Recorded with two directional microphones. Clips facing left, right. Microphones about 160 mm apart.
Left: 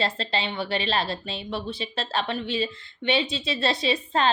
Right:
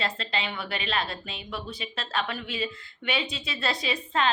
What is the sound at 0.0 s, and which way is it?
A woman's voice, 30° left (ahead or behind).